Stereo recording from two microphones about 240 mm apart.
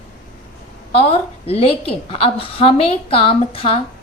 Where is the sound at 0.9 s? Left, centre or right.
Left.